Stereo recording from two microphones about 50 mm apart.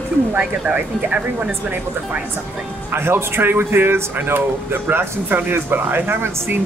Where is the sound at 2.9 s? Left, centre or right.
Right.